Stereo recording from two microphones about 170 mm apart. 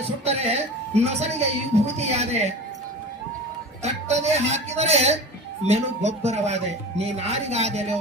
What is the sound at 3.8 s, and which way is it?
Speech, 40° right (ahead or behind).